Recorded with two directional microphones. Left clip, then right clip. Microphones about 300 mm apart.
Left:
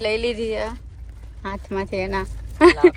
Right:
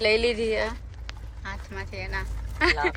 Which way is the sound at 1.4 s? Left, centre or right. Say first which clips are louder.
Left 10 dB; centre.